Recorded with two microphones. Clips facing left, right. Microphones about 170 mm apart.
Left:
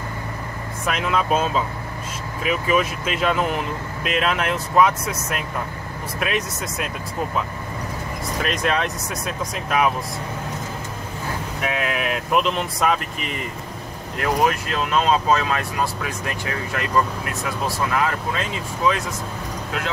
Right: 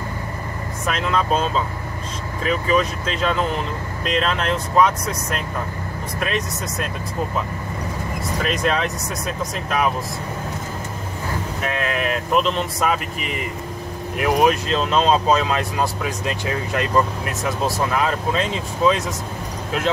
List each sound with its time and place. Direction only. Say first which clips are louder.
0.8 s speech: even; 5° left (ahead or behind)
8.4 s speech: right 1 dB; centre (ahead or behind)
11.6 s speech: even; 5° left (ahead or behind)
14.1 s speech: right 3 dB; 15° right (ahead or behind)
17.9 s speech: right 2 dB; 20° right (ahead or behind)